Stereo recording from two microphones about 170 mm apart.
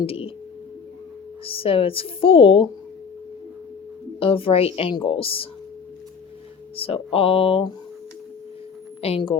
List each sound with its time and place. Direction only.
0.0 s a sound: 35° left (ahead or behind)
1.5 s a woman's voice: 35° left (ahead or behind)
4.2 s a woman's voice: 35° left (ahead or behind)
6.7 s a woman's voice: 35° left (ahead or behind)
9.0 s speech: 35° left (ahead or behind)